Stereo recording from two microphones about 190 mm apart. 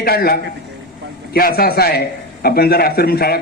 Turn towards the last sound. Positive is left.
turn(degrees=55)  # may be behind; listen again after turning